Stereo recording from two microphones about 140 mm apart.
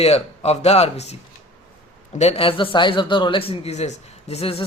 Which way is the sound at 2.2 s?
45° left (ahead or behind).